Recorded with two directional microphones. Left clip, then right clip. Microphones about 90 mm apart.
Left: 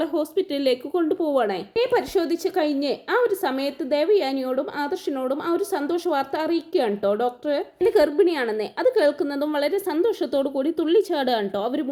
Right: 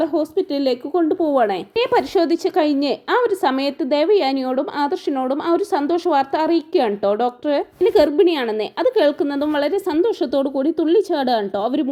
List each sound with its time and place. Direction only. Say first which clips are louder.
0.0 s a woman's voice: right 4 dB; 25° right (ahead or behind)
1.5 s a woman's voice: right 3 dB; 50° right (ahead or behind); by 7.6 s 30° right (ahead or behind)
7.9 s a woman's voice: right 4 dB; 50° right (ahead or behind); by 9.6 s 25° right (ahead or behind)
9.7 s a woman's voice: right 4 dB; 55° right (ahead or behind)
10.1 s a woman's voice: right 4 dB; 35° right (ahead or behind)